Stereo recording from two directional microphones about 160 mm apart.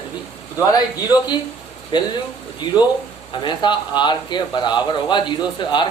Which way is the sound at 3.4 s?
30° left (ahead or behind).